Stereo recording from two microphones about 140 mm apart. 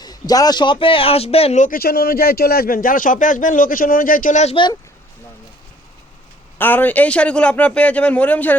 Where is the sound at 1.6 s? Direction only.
90° left; by 4.5 s 60° left (ahead or behind).